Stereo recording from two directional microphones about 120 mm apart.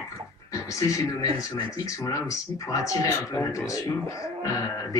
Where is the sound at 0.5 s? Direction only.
25° left (ahead or behind).